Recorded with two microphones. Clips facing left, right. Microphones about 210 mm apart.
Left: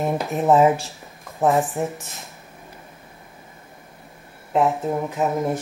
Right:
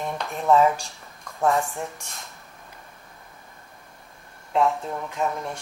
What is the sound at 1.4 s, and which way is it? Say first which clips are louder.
Speech: left 4 dB; 15° left (ahead or behind).